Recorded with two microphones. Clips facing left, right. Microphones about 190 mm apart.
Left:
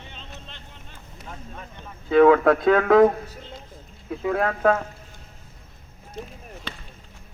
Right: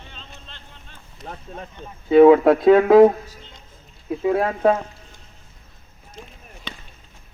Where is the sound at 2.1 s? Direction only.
20° right (ahead or behind).